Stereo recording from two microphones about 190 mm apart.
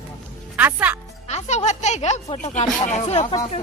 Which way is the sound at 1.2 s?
35° left (ahead or behind).